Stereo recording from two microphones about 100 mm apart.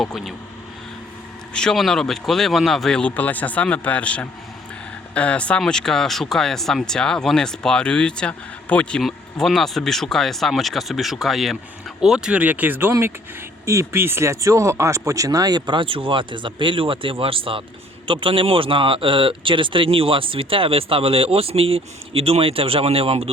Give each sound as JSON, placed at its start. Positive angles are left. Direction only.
{"t": 0.0, "sound": "speech", "side_deg": 0}
{"t": 1.5, "sound": "speech", "side_deg": 5}